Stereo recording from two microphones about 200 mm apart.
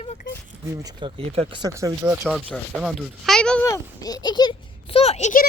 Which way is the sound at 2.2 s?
Centre (ahead or behind).